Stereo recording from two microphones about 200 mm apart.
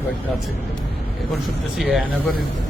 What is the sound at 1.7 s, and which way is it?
Speech, centre (ahead or behind).